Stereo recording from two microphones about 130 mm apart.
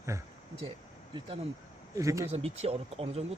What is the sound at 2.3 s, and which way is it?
Speech, 55° right (ahead or behind).